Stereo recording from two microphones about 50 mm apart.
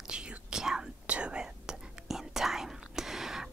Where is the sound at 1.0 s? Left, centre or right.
Right.